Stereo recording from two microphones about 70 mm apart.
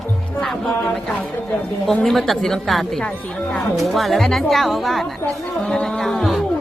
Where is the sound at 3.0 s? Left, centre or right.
Centre.